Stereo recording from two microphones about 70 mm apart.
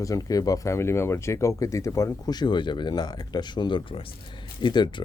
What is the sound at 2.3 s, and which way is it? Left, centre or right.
Speech, left.